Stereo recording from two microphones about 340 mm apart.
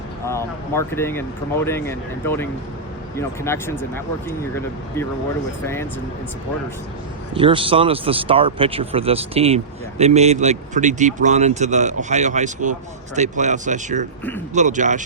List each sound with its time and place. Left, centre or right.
0.3 s speech: centre
7.3 s speech: centre